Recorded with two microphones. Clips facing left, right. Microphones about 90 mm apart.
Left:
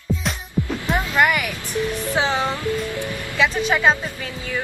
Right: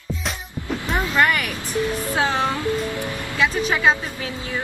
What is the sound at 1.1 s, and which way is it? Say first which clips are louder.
Vehicle: left 1 dB; 15° left (ahead or behind).